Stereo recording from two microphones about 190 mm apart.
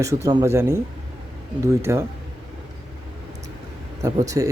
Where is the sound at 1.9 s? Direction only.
15° right (ahead or behind).